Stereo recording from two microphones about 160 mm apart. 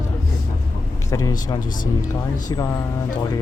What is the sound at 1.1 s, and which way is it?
Speech, 20° left (ahead or behind).